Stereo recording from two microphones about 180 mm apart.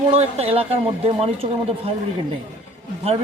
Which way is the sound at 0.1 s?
35° right (ahead or behind).